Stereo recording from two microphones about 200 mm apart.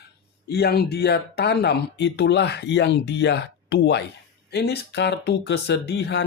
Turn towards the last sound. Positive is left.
turn(degrees=55)  # may be behind; listen again after turning